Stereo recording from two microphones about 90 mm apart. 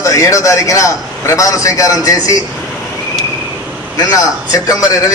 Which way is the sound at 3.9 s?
45° left (ahead or behind).